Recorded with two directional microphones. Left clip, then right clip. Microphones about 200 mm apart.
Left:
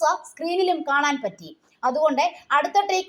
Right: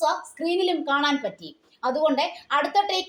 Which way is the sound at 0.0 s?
20° left (ahead or behind).